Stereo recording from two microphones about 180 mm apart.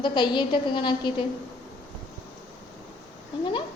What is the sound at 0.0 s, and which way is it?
A woman's voice, 25° left (ahead or behind).